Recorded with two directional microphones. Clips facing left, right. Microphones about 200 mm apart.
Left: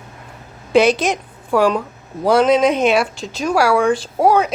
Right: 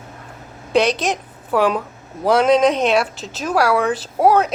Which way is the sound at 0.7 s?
Centre (ahead or behind).